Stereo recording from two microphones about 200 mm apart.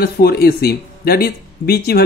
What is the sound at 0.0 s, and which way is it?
Speech, 50° left (ahead or behind).